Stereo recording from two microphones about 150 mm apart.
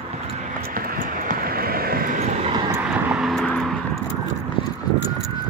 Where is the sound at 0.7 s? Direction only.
75° right (ahead or behind).